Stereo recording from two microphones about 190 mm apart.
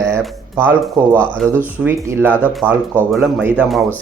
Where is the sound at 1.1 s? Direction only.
5° left (ahead or behind).